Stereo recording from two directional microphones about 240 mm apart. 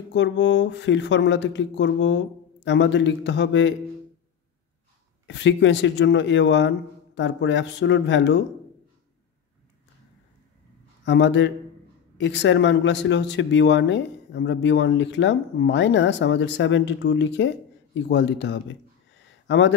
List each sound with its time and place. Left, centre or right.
0.1 s speech: left
5.2 s speech: left
11.1 s speech: left